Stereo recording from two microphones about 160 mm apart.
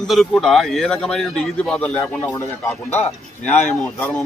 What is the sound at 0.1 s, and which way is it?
Speech, centre (ahead or behind).